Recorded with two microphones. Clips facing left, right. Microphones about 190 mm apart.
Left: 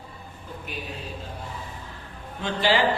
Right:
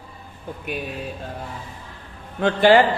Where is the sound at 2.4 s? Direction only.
55° right (ahead or behind).